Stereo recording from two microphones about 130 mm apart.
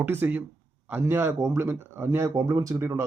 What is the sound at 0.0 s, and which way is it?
Speech, 15° right (ahead or behind).